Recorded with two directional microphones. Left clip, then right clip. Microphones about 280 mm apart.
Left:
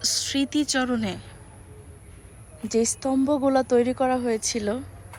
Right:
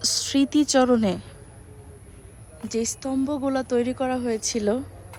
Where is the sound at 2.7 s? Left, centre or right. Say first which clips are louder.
Left 4 dB; centre.